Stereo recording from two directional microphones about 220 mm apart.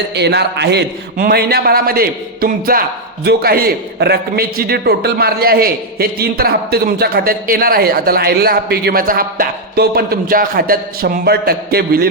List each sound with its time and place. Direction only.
0.1 s a man's voice: 50° right (ahead or behind)